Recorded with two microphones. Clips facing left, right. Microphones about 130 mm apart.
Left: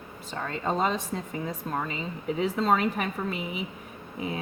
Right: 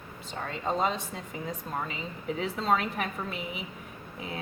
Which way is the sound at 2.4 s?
40° left (ahead or behind).